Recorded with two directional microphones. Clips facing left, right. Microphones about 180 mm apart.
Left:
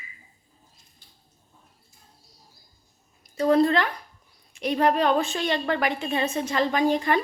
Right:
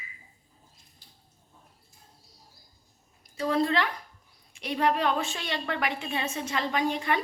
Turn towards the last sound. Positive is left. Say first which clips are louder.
# left 5 dB
turn(degrees=40)  # may be behind; listen again after turning